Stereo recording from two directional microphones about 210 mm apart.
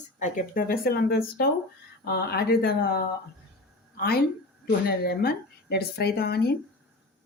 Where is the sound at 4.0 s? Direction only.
45° left (ahead or behind).